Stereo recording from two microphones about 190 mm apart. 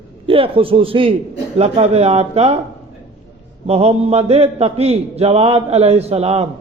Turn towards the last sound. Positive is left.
turn(degrees=-35)  # may be behind; listen again after turning